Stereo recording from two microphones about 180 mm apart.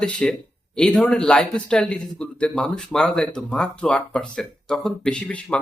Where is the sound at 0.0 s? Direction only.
5° left (ahead or behind).